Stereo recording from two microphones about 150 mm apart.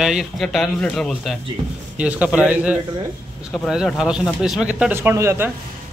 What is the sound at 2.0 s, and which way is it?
A man's voice, 10° right (ahead or behind).